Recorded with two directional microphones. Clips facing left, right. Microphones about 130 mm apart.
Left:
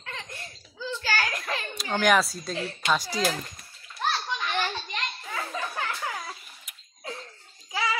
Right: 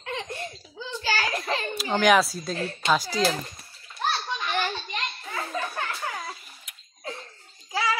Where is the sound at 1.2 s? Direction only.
10° right (ahead or behind).